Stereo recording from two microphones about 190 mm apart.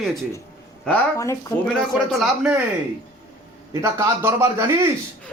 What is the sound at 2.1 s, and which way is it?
Speech, centre (ahead or behind).